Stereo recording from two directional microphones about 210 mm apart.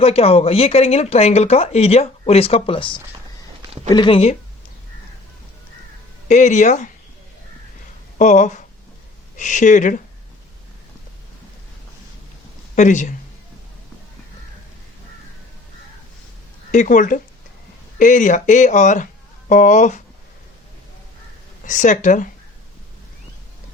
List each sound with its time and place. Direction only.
0.0 s speech: 30° left (ahead or behind)
6.2 s speech: 35° left (ahead or behind)
8.2 s speech: 35° left (ahead or behind)
12.7 s speech: 35° left (ahead or behind)
16.7 s speech: 35° left (ahead or behind)
21.6 s speech: 35° left (ahead or behind)